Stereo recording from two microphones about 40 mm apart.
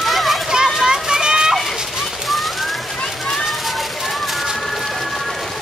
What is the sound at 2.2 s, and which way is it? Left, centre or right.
Bird, centre.